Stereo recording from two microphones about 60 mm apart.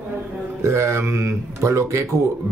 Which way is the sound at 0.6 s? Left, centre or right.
Right.